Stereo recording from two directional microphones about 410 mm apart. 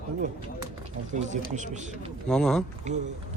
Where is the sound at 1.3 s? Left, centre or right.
Centre.